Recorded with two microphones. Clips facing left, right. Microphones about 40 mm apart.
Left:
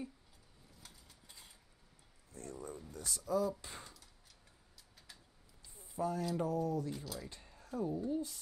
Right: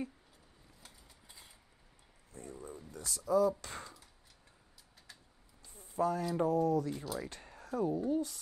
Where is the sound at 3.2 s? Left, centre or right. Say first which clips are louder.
Right 6 dB; right.